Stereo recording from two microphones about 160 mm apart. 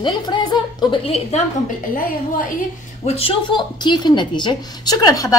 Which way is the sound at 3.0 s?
35° left (ahead or behind).